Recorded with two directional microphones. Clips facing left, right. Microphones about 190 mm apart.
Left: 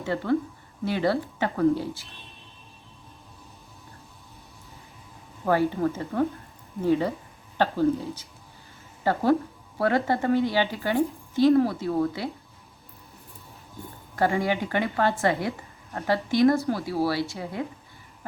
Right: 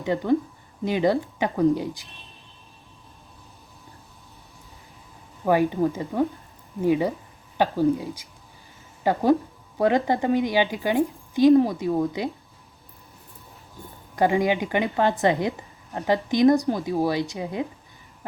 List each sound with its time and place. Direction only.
0.0 s a woman's voice: 15° right (ahead or behind)
5.5 s a woman's voice: 15° right (ahead or behind)
14.2 s a woman's voice: 15° right (ahead or behind)